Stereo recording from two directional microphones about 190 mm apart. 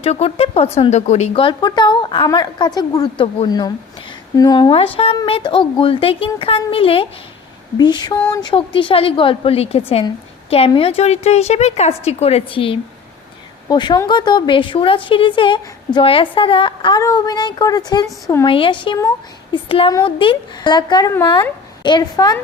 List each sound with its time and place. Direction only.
0.0 s a woman's voice: 35° left (ahead or behind); by 18.4 s 15° left (ahead or behind)
18.4 s speech: 25° left (ahead or behind)